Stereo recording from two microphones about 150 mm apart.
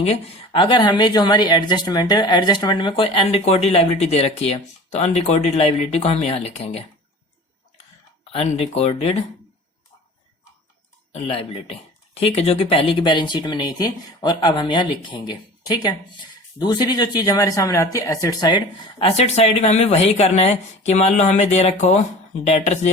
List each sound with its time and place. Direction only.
0.0 s speech: 40° left (ahead or behind)
8.3 s speech: 40° left (ahead or behind)
11.1 s speech: 40° left (ahead or behind)